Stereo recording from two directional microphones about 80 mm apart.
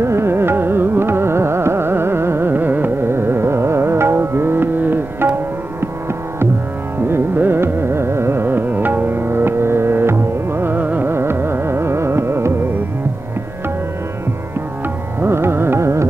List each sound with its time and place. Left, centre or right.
0.0 s carnatic music: right
7.1 s carnatic music: right
15.1 s music: right